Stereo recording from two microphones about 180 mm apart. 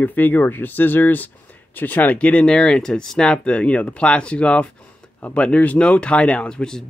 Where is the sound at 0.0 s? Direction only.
10° left (ahead or behind).